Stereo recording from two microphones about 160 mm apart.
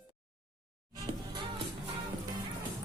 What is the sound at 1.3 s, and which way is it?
Music, 35° right (ahead or behind).